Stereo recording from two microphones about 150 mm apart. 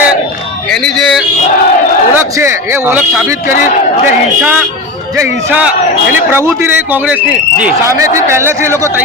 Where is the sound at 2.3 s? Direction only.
15° right (ahead or behind).